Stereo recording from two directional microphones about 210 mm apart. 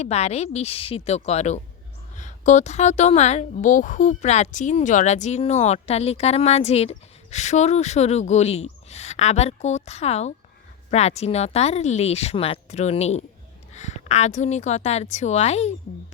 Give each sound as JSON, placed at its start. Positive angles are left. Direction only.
{"t": 0.0, "sound": "a woman's voice", "side_deg": 30}